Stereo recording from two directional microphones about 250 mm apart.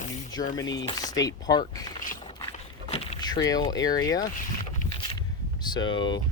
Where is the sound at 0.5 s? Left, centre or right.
Centre.